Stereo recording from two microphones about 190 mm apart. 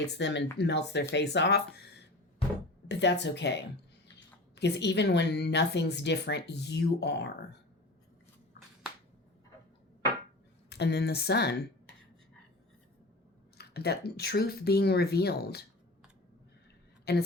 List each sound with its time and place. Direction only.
0.2 s a woman's voice: 65° left (ahead or behind)
10.7 s a woman's voice: 60° left (ahead or behind)
13.6 s a woman's voice: 60° left (ahead or behind)
17.1 s a woman's voice: 60° left (ahead or behind)